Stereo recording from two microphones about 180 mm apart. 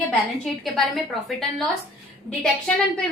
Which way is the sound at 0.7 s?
Centre (ahead or behind).